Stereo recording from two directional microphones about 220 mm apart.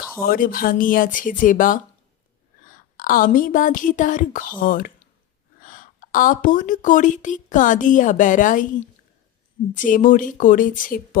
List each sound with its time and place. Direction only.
0.2 s a woman's voice: 40° left (ahead or behind)
9.7 s a woman's voice: 35° left (ahead or behind)